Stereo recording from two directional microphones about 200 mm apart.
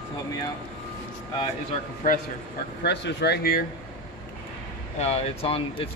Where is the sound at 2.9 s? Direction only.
55° left (ahead or behind).